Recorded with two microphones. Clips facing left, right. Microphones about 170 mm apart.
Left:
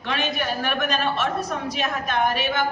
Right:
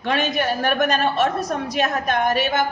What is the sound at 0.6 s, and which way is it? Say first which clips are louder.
A woman's voice: right 5 dB; 40° right (ahead or behind).